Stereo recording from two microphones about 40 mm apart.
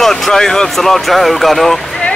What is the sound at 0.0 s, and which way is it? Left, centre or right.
Speech, centre.